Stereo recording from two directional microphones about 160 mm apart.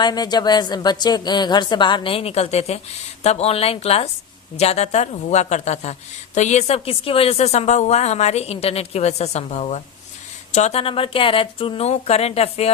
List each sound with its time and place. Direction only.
0.0 s a woman's voice: 25° left (ahead or behind)